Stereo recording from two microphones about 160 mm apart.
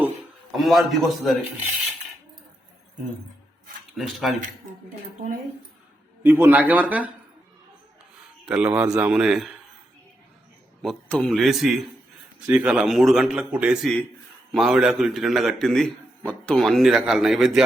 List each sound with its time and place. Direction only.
0.5 s a man's voice: centre (ahead or behind)
3.9 s a man's voice: centre (ahead or behind)
6.2 s a man's voice: 15° right (ahead or behind)
8.4 s a man's voice: 5° right (ahead or behind)
8.7 s speech: 20° right (ahead or behind)
9.0 s a man's voice: 5° right (ahead or behind)
10.8 s a man's voice: 5° left (ahead or behind)